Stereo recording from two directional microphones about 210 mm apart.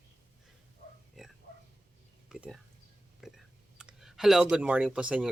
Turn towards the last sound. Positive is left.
turn(degrees=-5)  # may be behind; listen again after turning